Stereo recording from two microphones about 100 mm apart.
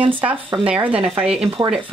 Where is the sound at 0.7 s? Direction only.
15° right (ahead or behind).